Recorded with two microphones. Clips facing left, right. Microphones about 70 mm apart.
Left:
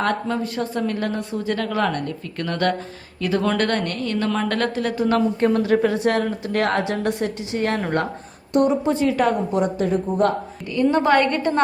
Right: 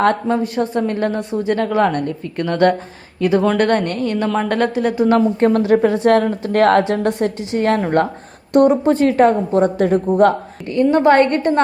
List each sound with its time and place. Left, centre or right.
0.0 s a woman's voice: right
8.5 s a woman's voice: right
9.1 s a woman's voice: right
9.7 s speech: right
10.8 s a woman's voice: right